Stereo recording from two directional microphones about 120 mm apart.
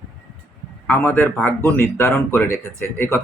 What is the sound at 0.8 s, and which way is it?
A man's voice, 15° left (ahead or behind).